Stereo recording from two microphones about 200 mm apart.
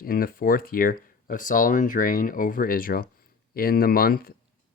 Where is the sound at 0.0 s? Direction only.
45° left (ahead or behind).